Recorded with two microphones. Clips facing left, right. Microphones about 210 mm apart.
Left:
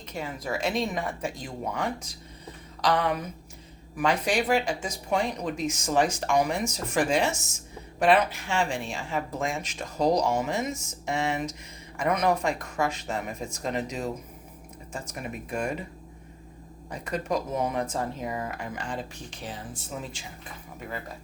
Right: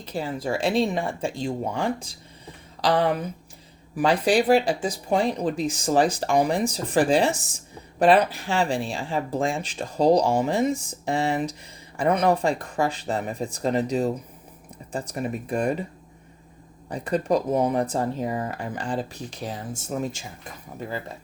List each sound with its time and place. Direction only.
0.0 s speech: 30° right (ahead or behind)
16.9 s speech: 35° right (ahead or behind)